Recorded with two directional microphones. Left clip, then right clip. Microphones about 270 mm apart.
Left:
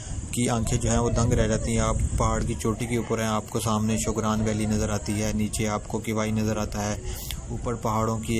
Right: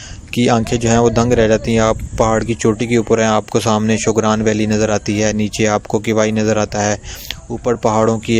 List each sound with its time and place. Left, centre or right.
0.3 s speech: right